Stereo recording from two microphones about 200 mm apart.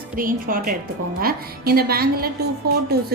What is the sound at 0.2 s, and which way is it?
A woman's voice, 45° right (ahead or behind).